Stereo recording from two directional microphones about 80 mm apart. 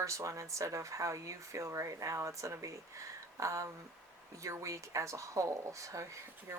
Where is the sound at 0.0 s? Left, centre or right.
Right.